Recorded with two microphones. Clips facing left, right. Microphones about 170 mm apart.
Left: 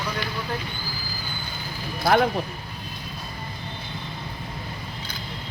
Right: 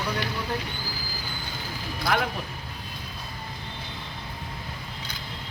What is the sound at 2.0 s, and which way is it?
Speech, 40° left (ahead or behind).